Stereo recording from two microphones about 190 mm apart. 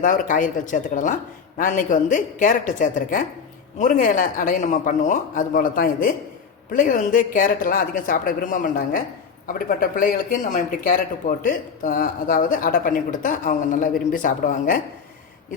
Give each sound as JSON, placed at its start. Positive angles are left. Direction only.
{"t": 0.0, "sound": "a woman's voice", "side_deg": 40}